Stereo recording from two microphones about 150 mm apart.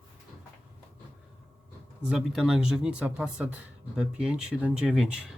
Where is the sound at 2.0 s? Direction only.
Centre (ahead or behind).